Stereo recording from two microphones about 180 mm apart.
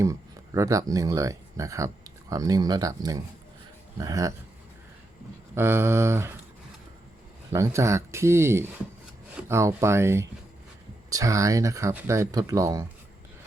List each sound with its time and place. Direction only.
0.0 s speech: 15° right (ahead or behind)
5.5 s speech: 15° right (ahead or behind)
7.5 s speech: 15° right (ahead or behind)